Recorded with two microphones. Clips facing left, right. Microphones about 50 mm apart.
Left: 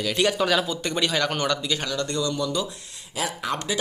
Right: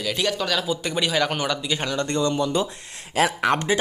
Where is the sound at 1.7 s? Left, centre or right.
Right.